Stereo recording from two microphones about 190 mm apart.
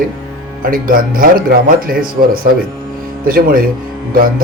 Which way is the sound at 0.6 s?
45° right (ahead or behind).